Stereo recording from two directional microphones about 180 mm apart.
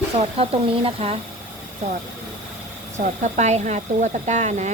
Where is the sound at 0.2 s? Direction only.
35° right (ahead or behind).